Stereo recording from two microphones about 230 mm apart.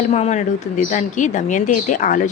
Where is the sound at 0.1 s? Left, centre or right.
Left.